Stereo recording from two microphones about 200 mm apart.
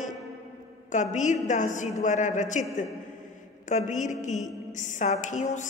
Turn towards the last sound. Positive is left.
turn(degrees=35)  # may be behind; listen again after turning